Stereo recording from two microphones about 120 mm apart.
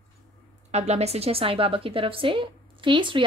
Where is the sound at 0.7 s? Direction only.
65° right (ahead or behind).